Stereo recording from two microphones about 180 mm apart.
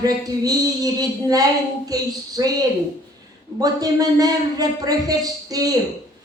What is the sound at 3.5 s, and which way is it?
A man's voice, 20° right (ahead or behind).